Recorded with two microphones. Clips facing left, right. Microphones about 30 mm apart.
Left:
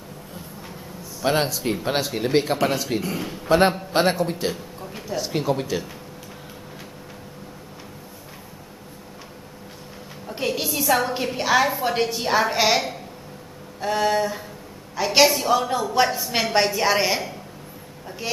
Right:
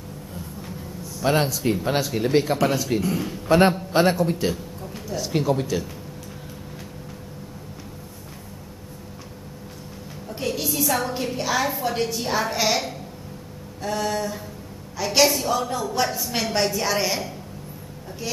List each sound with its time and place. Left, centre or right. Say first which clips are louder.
1.2 s speech: right 1 dB; centre
10.2 s music: left 2 dB; left
10.7 s a woman's voice: left 4 dB; centre